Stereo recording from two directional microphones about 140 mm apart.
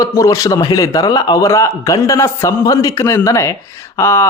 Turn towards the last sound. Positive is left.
turn(degrees=20)  # may be behind; listen again after turning